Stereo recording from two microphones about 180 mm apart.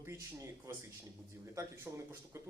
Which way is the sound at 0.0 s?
15° right (ahead or behind).